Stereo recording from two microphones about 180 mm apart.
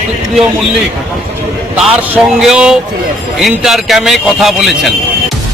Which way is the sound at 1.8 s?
Centre (ahead or behind).